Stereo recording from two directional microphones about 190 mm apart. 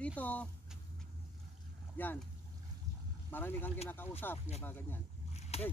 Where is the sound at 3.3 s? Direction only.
10° left (ahead or behind).